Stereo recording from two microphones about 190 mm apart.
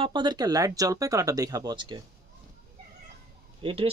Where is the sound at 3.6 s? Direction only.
30° right (ahead or behind).